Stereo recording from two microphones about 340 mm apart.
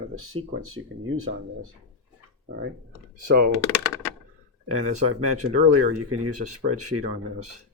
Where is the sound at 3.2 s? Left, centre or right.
Right.